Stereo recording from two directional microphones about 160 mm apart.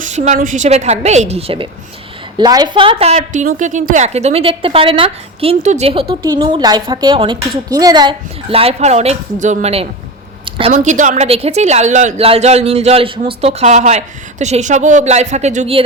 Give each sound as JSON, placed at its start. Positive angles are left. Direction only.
{"t": 0.0, "sound": "a sound", "side_deg": -50}
{"t": 0.3, "sound": "a woman's voice", "side_deg": -55}
{"t": 2.4, "sound": "a woman's voice", "side_deg": -25}
{"t": 10.7, "sound": "a woman's voice", "side_deg": -50}